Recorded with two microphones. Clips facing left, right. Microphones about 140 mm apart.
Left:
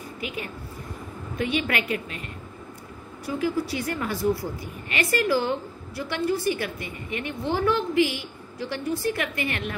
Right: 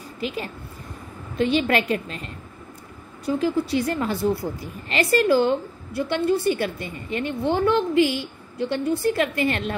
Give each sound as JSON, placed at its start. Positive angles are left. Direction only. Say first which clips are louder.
{"t": 1.4, "sound": "a woman's voice", "louder": "right 6 dB", "side_deg": -30}